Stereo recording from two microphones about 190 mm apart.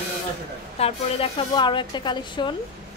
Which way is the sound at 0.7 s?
30° left (ahead or behind).